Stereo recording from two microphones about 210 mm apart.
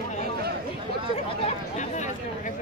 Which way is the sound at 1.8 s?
35° left (ahead or behind).